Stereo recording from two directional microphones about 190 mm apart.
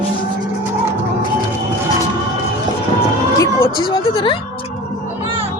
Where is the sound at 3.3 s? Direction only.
15° left (ahead or behind).